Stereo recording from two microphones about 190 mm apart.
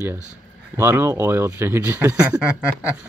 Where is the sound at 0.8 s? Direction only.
10° right (ahead or behind).